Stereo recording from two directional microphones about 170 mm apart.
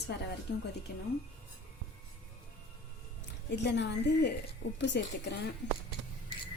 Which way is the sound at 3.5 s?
90° left.